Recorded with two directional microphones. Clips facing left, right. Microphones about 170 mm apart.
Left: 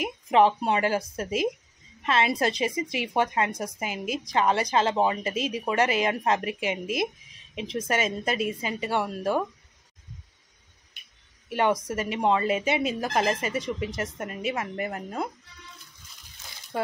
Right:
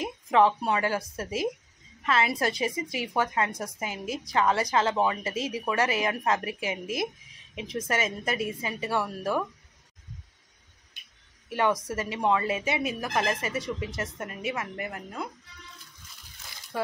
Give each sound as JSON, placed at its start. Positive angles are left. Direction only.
{"t": 0.0, "sound": "speech", "side_deg": 20}
{"t": 11.5, "sound": "speech", "side_deg": 20}